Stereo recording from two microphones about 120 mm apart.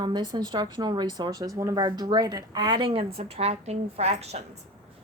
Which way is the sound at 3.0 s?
60° right (ahead or behind).